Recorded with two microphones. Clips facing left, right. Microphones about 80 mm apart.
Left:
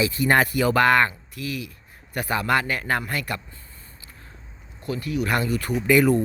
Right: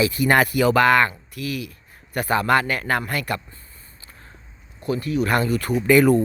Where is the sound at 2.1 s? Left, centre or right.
Right.